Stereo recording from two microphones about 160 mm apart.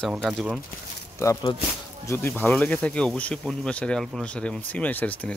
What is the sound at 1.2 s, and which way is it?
Speech, 20° left (ahead or behind).